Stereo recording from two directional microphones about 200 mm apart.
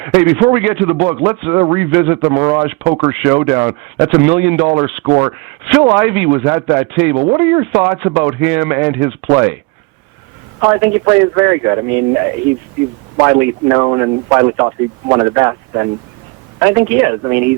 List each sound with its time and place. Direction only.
0.0 s speech: 10° right (ahead or behind)
10.6 s speech: 15° right (ahead or behind)